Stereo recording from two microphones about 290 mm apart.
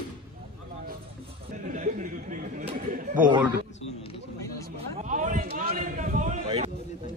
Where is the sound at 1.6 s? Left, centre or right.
Right.